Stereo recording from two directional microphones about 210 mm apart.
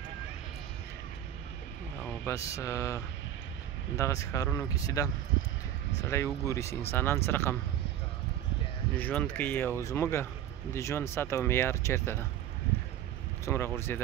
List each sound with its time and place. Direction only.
2.0 s speech: 15° left (ahead or behind)
8.9 s speech: 5° left (ahead or behind)
13.7 s speech: 10° left (ahead or behind)